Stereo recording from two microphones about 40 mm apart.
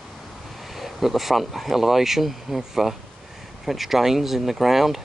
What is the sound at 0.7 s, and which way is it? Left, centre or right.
Speech, centre.